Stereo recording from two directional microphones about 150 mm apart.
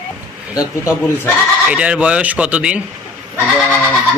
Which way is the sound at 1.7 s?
10° right (ahead or behind).